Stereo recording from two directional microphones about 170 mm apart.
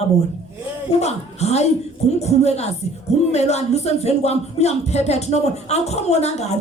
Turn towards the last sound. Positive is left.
turn(degrees=40)  # may be behind; listen again after turning